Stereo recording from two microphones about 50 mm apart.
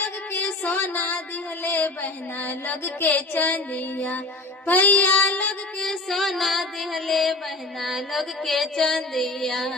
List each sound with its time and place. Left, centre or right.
0.6 s music: left
5.8 s music: centre